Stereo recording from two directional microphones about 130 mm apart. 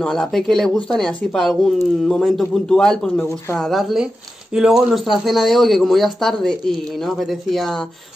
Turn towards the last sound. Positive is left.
turn(degrees=0)  # may be behind; listen again after turning